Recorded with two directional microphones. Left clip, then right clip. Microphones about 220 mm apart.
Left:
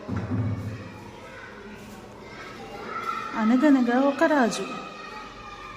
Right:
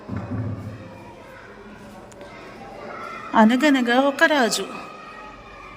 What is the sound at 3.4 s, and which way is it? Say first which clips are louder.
Speech: right 5 dB; 40° right (ahead or behind).